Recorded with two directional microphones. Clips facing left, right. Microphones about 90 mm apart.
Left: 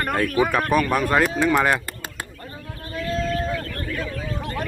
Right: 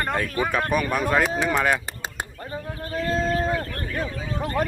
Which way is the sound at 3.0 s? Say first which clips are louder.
Right 1 dB; 35° right (ahead or behind).